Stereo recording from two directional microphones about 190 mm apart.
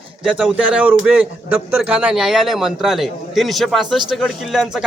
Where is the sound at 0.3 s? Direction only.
5° right (ahead or behind).